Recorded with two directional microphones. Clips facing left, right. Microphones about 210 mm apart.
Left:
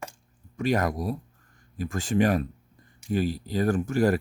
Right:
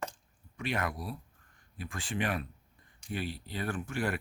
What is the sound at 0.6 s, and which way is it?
Speech, 40° left (ahead or behind).